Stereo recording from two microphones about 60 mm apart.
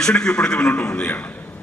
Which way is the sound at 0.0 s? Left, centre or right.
Centre.